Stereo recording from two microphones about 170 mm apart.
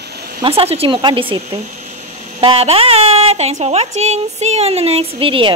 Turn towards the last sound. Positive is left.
turn(degrees=-30)  # may be behind; listen again after turning